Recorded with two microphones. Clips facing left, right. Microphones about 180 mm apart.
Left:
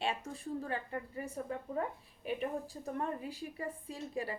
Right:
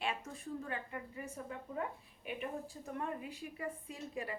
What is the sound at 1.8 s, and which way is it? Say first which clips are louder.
A woman's voice: left 4 dB; 35° left (ahead or behind).